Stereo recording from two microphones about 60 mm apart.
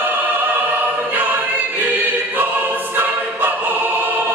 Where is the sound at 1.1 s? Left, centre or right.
Right.